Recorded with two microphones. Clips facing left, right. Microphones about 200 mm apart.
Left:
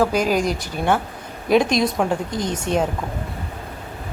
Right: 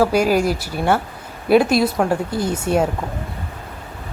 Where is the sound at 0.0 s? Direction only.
10° right (ahead or behind).